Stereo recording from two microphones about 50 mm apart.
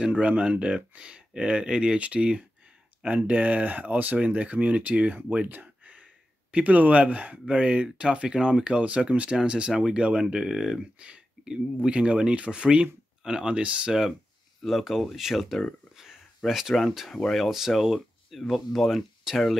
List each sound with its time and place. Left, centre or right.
0.0 s speech: right
5.5 s a sound: right
6.5 s speech: right; by 10.8 s centre
10.8 s speech: right
14.6 s speech: centre